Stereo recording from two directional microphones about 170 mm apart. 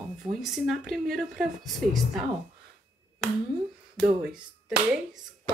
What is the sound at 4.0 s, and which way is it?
Speech, 5° right (ahead or behind).